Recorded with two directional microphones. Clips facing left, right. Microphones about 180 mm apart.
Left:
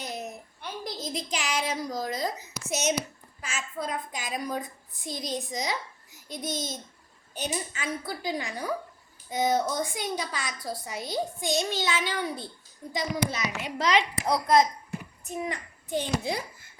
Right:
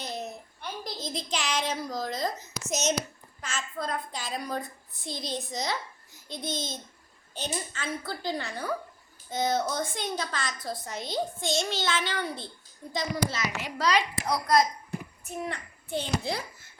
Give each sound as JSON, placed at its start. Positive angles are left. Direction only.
{"t": 1.1, "sound": "a woman's voice", "side_deg": 10}
{"t": 5.1, "sound": "a child's voice", "side_deg": 40}
{"t": 5.4, "sound": "a woman's voice", "side_deg": 15}
{"t": 6.5, "sound": "a child's voice", "side_deg": 40}
{"t": 7.3, "sound": "a woman's voice", "side_deg": 10}